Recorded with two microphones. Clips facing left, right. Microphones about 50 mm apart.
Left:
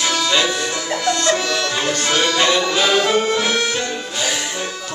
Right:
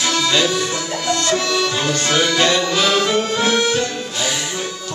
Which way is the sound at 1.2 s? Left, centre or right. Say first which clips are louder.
Even; centre.